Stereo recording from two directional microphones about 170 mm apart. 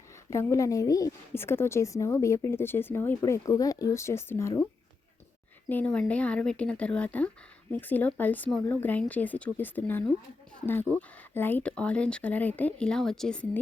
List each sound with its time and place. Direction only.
0.3 s a woman's voice: 15° left (ahead or behind)
5.6 s a woman's voice: 10° left (ahead or behind)